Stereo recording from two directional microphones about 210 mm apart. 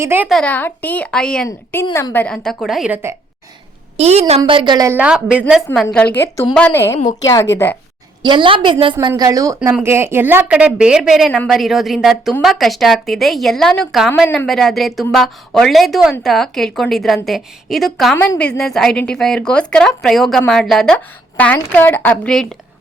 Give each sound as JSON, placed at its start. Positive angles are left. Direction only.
{"t": 0.0, "sound": "speech", "side_deg": -10}
{"t": 0.3, "sound": "a woman's voice", "side_deg": 5}
{"t": 3.9, "sound": "a woman's voice", "side_deg": -30}
{"t": 8.2, "sound": "a woman's voice", "side_deg": -25}